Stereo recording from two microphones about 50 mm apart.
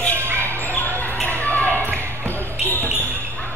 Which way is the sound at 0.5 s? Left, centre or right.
Left.